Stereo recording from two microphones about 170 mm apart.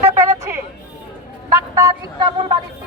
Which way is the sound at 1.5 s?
20° right (ahead or behind).